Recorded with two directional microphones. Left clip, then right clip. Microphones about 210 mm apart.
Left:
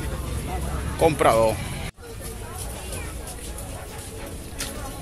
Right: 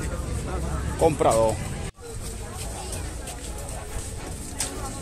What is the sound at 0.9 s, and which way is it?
Speech, centre (ahead or behind).